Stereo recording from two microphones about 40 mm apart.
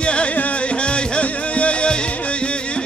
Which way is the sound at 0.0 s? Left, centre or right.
Left.